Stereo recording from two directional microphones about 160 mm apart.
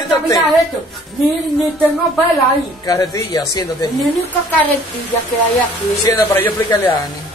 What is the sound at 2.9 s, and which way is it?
Speech, 20° left (ahead or behind).